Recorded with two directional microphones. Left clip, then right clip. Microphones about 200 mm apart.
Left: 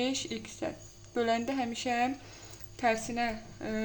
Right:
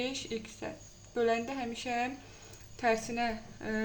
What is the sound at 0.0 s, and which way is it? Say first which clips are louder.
A woman's voice: left 3 dB; 20° left (ahead or behind).